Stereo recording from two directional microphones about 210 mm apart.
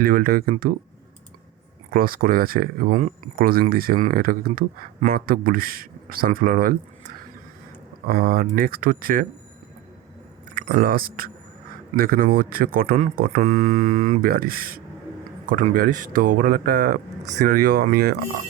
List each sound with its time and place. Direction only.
0.0 s speech: 45° right (ahead or behind)
1.9 s speech: 45° right (ahead or behind)
8.0 s speech: 45° right (ahead or behind)
10.5 s speech: 45° right (ahead or behind)